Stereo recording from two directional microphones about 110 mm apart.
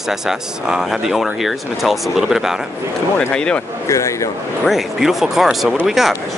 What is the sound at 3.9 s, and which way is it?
Speech, 25° left (ahead or behind).